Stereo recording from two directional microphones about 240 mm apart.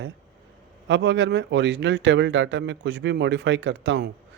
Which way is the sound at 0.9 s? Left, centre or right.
Right.